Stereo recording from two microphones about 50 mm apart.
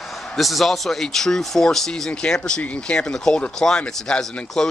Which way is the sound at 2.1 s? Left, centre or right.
Centre.